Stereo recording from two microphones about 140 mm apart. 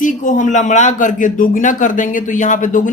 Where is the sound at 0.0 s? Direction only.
65° left (ahead or behind).